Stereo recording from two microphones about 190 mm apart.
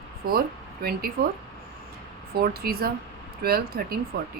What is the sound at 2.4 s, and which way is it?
Speech, 55° right (ahead or behind).